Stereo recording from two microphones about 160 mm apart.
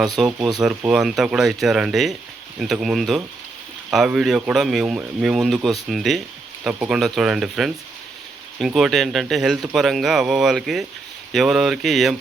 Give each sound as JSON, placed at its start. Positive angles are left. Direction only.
{"t": 0.3, "sound": "speech", "side_deg": -25}
{"t": 0.9, "sound": "speech", "side_deg": -5}